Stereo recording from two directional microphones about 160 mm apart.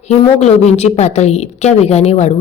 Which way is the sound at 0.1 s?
45° left (ahead or behind).